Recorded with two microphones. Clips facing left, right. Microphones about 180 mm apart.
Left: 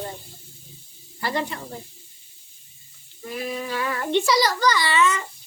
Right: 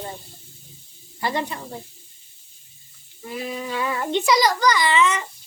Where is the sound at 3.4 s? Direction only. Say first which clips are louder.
Right 1 dB; 20° right (ahead or behind).